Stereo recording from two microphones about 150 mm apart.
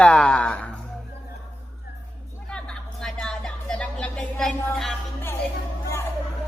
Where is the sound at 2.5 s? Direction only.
5° left (ahead or behind).